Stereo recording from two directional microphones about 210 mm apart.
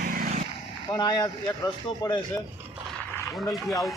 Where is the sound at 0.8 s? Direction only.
20° left (ahead or behind).